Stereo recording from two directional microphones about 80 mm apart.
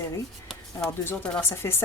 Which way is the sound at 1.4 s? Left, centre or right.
Left.